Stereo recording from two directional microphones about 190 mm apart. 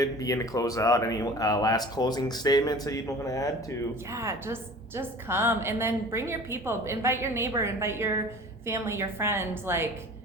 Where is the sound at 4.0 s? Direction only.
15° right (ahead or behind).